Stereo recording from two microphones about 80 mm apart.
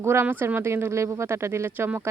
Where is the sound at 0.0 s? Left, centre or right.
Right.